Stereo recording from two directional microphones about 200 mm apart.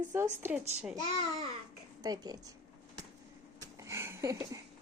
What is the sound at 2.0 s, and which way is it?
Speech, 20° right (ahead or behind).